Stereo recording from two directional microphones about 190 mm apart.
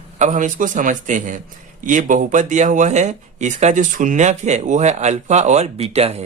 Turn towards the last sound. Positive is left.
turn(degrees=-35)  # may be behind; listen again after turning